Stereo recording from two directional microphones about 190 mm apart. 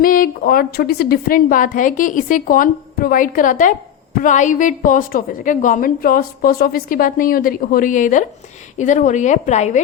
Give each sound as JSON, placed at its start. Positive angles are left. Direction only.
{"t": 0.0, "sound": "a woman's voice", "side_deg": 50}